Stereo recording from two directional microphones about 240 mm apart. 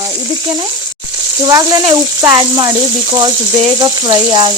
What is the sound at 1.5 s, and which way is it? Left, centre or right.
Speech, centre.